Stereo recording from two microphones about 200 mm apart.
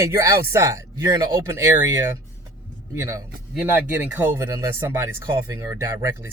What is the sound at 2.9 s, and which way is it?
Speech, 15° right (ahead or behind).